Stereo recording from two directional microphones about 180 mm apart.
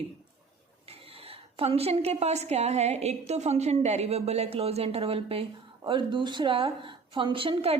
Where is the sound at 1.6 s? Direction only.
35° right (ahead or behind).